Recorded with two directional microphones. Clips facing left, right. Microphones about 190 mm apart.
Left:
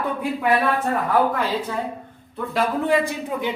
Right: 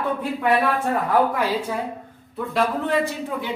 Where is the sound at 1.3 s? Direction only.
10° right (ahead or behind).